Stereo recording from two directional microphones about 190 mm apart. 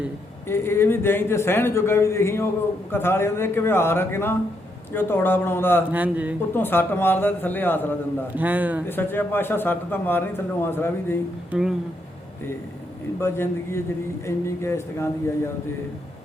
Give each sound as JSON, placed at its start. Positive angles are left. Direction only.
{"t": 0.4, "sound": "a man's voice", "side_deg": 10}
{"t": 5.9, "sound": "speech", "side_deg": -10}
{"t": 6.5, "sound": "a man's voice", "side_deg": 10}
{"t": 8.4, "sound": "speech", "side_deg": -10}
{"t": 8.9, "sound": "a man's voice", "side_deg": 10}
{"t": 13.1, "sound": "a man's voice", "side_deg": 15}